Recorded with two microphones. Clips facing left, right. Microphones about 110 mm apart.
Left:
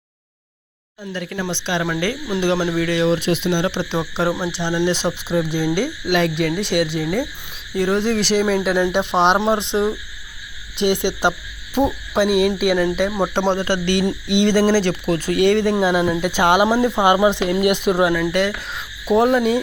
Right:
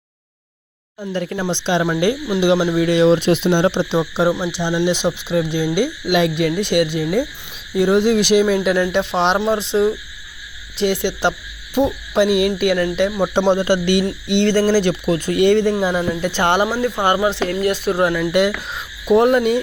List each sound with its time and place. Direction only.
1.1 s speech: 30° right (ahead or behind)
2.2 s speech: 5° right (ahead or behind); by 3.8 s 30° right (ahead or behind)
4.0 s speech: 5° right (ahead or behind)
8.8 s hoot: 15° left (ahead or behind)
9.4 s speech: 20° left (ahead or behind)
10.8 s hoot: 15° left (ahead or behind)
13.3 s speech: 5° right (ahead or behind)
14.3 s hoot: 5° left (ahead or behind)
14.8 s speech: 5° right (ahead or behind)
16.6 s speech: 25° left (ahead or behind)
17.5 s hoot: 20° left (ahead or behind)
18.0 s speech: centre (ahead or behind)
18.3 s speech: 10° right (ahead or behind)
19.0 s speech: centre (ahead or behind)